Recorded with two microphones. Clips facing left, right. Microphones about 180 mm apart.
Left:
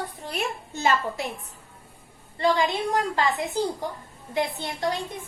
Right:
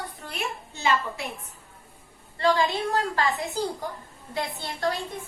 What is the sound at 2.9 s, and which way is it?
A woman's voice, 20° left (ahead or behind).